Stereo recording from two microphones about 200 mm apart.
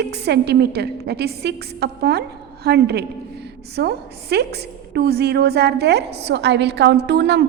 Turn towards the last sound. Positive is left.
turn(degrees=-55)  # may be behind; listen again after turning